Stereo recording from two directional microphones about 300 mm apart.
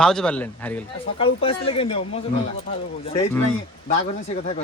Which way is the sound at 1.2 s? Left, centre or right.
Centre.